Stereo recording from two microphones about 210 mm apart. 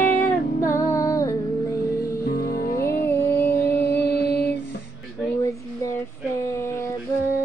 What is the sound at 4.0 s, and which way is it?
Mantra, 50° left (ahead or behind).